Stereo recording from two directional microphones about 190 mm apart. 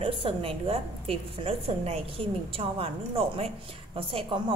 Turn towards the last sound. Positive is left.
turn(degrees=-30)  # may be behind; listen again after turning